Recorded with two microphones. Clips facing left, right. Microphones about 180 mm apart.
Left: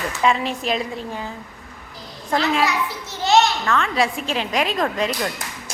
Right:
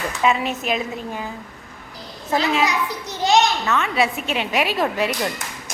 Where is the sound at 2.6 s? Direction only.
15° right (ahead or behind).